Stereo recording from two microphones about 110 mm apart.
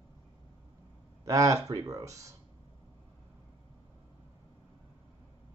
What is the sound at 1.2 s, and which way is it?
Speech, 30° right (ahead or behind).